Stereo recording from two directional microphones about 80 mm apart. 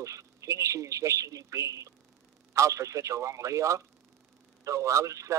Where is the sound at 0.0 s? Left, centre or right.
Right.